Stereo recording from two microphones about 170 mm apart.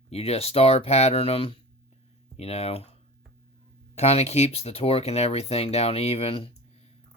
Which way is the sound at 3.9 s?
40° left (ahead or behind).